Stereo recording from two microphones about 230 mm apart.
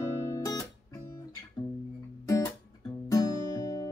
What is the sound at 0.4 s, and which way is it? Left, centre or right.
Music, centre.